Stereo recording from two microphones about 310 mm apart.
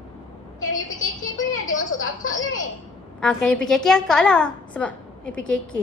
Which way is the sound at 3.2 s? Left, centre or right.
Centre.